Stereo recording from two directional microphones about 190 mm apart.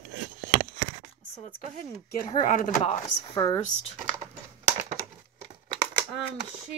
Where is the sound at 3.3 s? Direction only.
20° left (ahead or behind).